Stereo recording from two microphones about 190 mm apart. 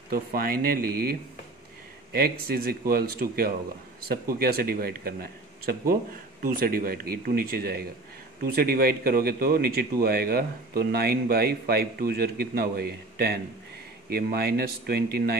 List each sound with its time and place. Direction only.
0.1 s speech: 50° right (ahead or behind)
2.1 s speech: 50° right (ahead or behind)